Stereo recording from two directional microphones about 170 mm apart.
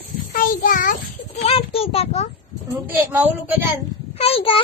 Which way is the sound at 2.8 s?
10° right (ahead or behind).